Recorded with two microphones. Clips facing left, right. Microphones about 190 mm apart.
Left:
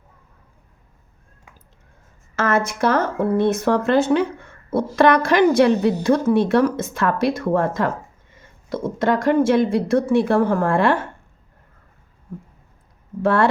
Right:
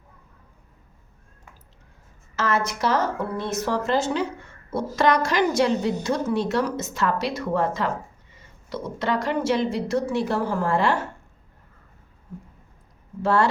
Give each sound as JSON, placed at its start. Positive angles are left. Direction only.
{"t": 2.3, "sound": "speech", "side_deg": 50}
{"t": 13.2, "sound": "speech", "side_deg": 55}